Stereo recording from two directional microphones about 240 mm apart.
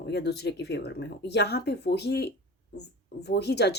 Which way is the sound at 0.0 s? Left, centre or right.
Left.